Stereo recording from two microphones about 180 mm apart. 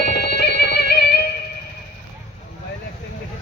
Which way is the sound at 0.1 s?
65° left (ahead or behind).